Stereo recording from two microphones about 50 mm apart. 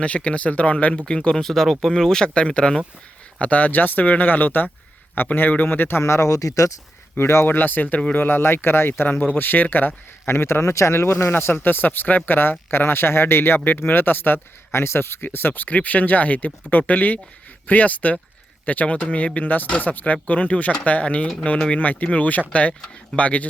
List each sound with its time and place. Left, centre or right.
0.0 s speech: left
3.3 s speech: left
6.0 s speech: left
7.2 s speech: left
7.4 s speech: left
10.2 s speech: left
11.3 s speech: left
12.4 s speech: left
14.7 s speech: left